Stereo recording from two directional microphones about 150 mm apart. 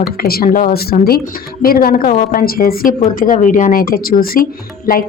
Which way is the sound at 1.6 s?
75° left (ahead or behind).